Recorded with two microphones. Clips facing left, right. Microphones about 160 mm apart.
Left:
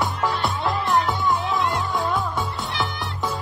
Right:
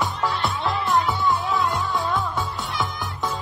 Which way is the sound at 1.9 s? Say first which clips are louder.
Left 1 dB; 15° left (ahead or behind).